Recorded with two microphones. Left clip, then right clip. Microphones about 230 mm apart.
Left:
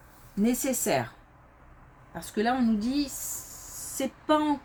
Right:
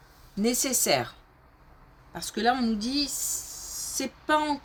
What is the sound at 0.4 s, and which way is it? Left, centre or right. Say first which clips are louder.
Speech: right 2 dB; right.